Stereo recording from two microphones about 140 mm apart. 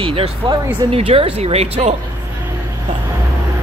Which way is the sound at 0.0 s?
40° right (ahead or behind).